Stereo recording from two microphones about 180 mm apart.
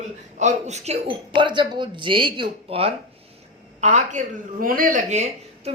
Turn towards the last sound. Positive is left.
turn(degrees=-40)  # may be behind; listen again after turning